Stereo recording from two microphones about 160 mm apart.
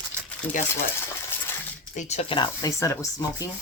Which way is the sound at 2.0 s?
40° left (ahead or behind).